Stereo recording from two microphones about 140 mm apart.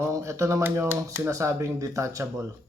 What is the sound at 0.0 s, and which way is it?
Speech, 20° right (ahead or behind).